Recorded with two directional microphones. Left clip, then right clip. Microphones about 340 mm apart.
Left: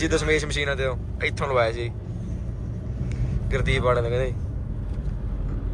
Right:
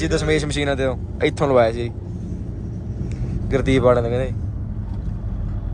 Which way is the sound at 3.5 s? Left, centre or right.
Centre.